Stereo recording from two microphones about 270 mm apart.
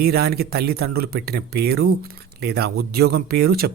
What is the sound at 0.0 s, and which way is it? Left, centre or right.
Speech, right.